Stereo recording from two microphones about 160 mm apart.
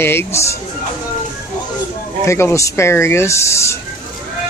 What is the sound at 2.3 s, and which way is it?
Speech, 15° left (ahead or behind).